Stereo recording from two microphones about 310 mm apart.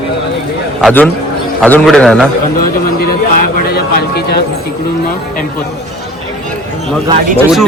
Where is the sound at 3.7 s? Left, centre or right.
Left.